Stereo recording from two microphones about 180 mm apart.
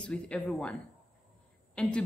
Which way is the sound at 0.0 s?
5° left (ahead or behind).